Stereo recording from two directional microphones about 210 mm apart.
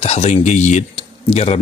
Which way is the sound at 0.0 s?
30° left (ahead or behind).